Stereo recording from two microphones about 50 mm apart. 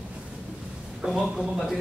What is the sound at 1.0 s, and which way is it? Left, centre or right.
Speech, centre.